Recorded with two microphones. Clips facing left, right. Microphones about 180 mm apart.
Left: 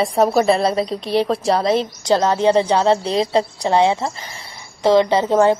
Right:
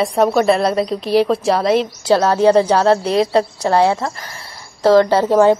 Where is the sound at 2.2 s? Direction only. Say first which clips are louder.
Right 4 dB; 15° left (ahead or behind).